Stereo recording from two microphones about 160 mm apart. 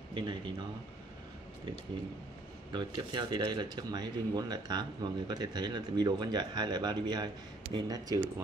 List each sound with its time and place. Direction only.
0.1 s speech: 30° right (ahead or behind)
2.7 s speech: 30° right (ahead or behind)